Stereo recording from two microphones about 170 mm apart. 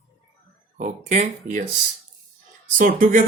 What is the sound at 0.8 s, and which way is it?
Speech, 45° right (ahead or behind).